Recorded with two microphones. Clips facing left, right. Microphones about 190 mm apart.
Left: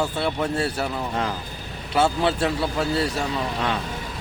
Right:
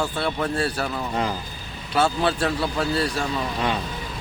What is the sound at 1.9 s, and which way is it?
Speech, 20° left (ahead or behind).